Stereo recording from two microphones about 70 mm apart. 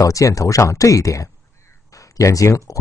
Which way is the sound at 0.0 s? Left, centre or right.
Left.